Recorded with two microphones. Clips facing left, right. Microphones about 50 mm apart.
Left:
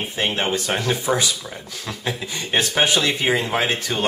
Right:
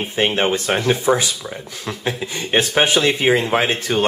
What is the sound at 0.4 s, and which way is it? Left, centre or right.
Speech, right.